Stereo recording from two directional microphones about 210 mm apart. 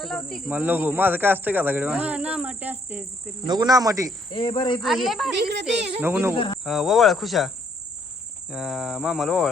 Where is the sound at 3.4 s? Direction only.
20° right (ahead or behind).